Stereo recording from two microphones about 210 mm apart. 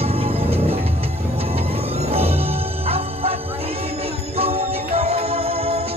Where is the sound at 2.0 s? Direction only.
30° right (ahead or behind).